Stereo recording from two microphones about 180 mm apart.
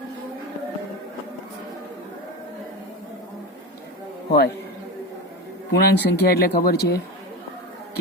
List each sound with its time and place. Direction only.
4.3 s a man's voice: 60° left (ahead or behind)
5.7 s speech: 65° left (ahead or behind)